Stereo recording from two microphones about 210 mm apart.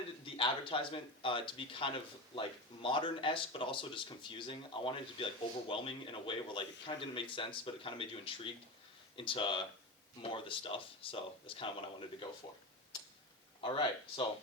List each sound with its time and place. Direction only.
0.3 s speech: 25° left (ahead or behind)
13.6 s speech: 25° left (ahead or behind)